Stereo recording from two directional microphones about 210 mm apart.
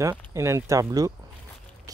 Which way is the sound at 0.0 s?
15° right (ahead or behind).